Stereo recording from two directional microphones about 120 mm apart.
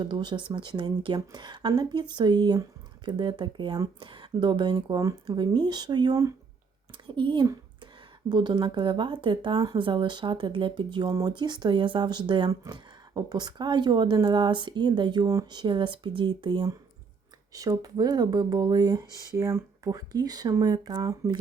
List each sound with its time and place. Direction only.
0.0 s speech: 40° right (ahead or behind)
6.9 s a woman's voice: 40° right (ahead or behind)